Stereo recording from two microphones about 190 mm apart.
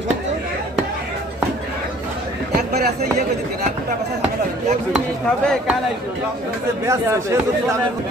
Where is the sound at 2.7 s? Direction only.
55° right (ahead or behind).